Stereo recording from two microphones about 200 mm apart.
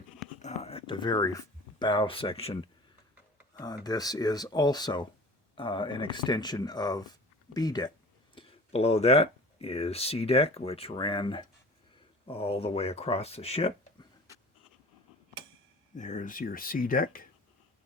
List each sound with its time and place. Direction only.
0.4 s speech: 30° left (ahead or behind)
16.0 s speech: 35° left (ahead or behind)